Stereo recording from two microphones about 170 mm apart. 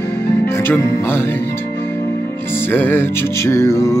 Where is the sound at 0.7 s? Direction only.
15° left (ahead or behind).